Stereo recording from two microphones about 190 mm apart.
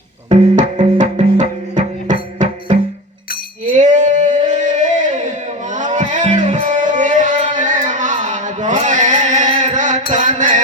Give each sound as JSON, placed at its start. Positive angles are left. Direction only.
{"t": 0.3, "sound": "music", "side_deg": -30}
{"t": 3.8, "sound": "a sound", "side_deg": -40}
{"t": 5.7, "sound": "music", "side_deg": -40}